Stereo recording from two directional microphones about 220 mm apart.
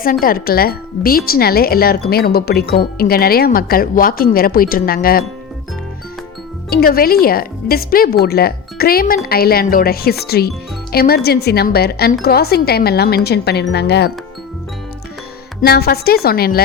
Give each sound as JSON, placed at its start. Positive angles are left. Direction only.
{"t": 0.0, "sound": "speech", "side_deg": 40}
{"t": 6.7, "sound": "speech", "side_deg": 45}
{"t": 15.6, "sound": "speech", "side_deg": 45}